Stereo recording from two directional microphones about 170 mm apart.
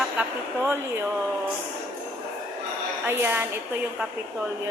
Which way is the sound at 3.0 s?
15° right (ahead or behind).